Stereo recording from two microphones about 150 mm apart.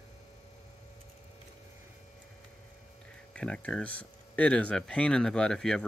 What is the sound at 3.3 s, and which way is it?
Speech, 5° left (ahead or behind).